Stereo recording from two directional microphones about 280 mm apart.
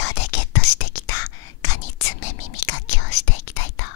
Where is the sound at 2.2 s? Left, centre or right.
Left.